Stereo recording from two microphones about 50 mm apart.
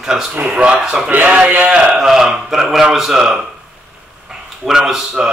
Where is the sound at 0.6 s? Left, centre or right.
Centre.